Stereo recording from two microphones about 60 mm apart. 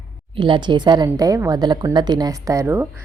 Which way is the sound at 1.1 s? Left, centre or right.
Right.